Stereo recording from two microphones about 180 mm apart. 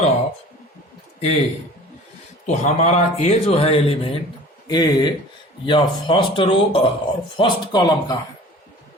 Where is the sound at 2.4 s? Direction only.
40° left (ahead or behind).